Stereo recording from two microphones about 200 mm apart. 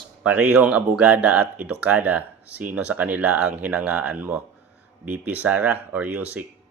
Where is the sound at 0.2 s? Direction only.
5° right (ahead or behind).